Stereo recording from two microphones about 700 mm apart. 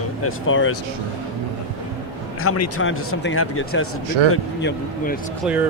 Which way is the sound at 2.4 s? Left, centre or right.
Centre.